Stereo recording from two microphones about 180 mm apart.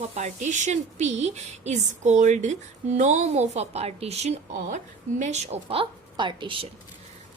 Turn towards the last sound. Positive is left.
turn(degrees=-25)  # may be behind; listen again after turning